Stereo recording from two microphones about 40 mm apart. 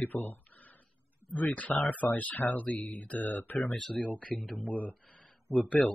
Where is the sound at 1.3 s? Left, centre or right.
Left.